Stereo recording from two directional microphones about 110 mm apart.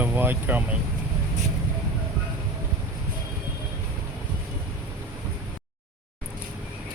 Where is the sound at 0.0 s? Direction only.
15° right (ahead or behind).